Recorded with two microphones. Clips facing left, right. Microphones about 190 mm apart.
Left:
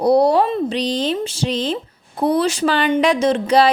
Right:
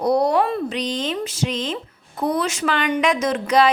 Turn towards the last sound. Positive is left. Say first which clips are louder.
# left 3 dB
turn(degrees=30)  # may be behind; listen again after turning